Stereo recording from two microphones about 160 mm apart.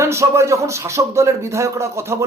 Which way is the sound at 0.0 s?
15° right (ahead or behind).